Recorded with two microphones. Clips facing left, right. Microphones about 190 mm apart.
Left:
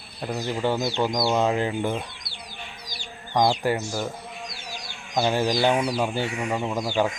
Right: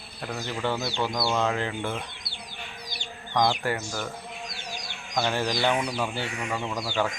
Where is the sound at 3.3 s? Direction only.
20° left (ahead or behind).